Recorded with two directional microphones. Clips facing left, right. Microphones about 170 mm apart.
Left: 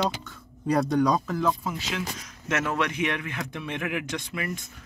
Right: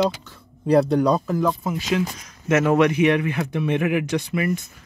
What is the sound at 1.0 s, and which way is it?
Speech, 5° right (ahead or behind).